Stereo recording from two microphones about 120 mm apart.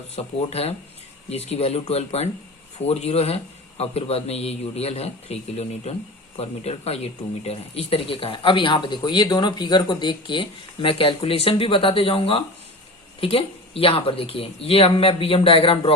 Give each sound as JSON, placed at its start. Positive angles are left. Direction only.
{"t": 0.2, "sound": "a man's voice", "side_deg": 55}